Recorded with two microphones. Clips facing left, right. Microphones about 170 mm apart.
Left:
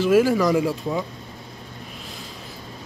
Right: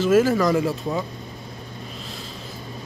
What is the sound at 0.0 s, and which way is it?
Speech, 10° left (ahead or behind).